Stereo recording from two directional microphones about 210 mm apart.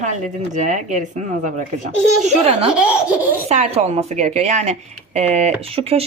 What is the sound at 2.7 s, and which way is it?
Laughter, 5° right (ahead or behind).